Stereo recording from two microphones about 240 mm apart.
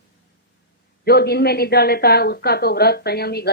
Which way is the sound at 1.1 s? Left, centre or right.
Left.